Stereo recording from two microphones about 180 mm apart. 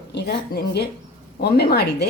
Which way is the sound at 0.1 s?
65° left (ahead or behind).